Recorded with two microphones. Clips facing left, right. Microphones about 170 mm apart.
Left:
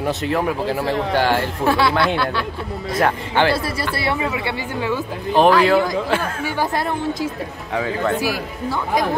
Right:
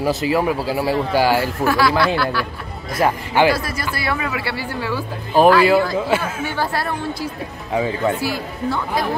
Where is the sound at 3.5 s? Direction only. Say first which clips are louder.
Even; 30° left (ahead or behind).